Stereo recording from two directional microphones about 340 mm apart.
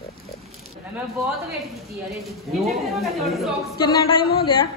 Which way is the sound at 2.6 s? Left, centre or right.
Centre.